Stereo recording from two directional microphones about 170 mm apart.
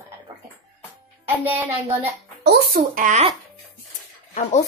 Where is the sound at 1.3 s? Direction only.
10° right (ahead or behind).